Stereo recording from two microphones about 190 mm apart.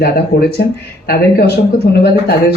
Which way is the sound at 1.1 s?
55° left (ahead or behind).